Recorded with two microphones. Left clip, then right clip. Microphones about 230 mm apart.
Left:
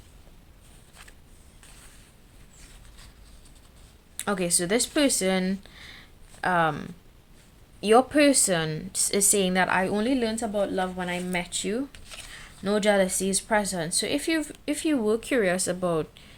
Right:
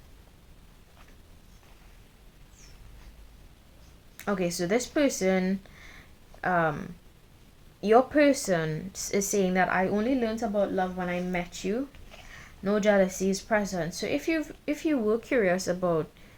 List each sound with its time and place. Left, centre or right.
4.2 s speech: left